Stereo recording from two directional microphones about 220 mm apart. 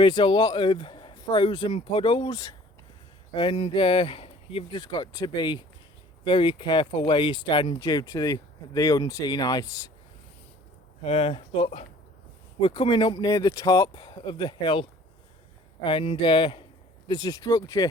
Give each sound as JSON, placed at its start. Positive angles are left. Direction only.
{"t": 0.0, "sound": "speech", "side_deg": 20}
{"t": 11.0, "sound": "speech", "side_deg": 25}